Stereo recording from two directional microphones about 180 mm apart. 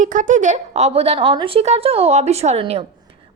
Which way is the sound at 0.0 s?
45° right (ahead or behind).